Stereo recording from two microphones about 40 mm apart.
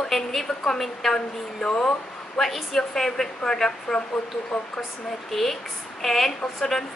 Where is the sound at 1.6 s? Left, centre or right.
Left.